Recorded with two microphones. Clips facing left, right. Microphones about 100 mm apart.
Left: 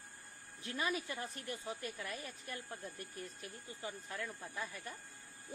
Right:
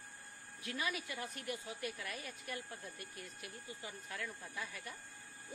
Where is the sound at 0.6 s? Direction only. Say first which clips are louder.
Left 2 dB; 35° left (ahead or behind).